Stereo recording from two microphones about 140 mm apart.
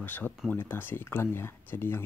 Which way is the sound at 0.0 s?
10° left (ahead or behind).